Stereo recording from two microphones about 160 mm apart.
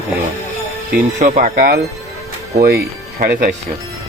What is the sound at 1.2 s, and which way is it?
Speech, 50° right (ahead or behind).